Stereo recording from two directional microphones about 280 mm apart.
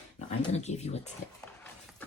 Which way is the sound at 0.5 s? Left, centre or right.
Left.